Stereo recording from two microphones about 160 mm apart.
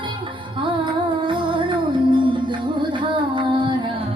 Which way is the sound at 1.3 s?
30° right (ahead or behind).